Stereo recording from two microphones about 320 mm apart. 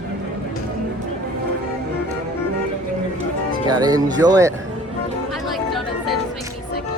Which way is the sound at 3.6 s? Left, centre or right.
Centre.